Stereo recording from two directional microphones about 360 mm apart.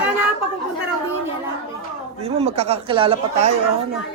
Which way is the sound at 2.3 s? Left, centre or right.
Centre.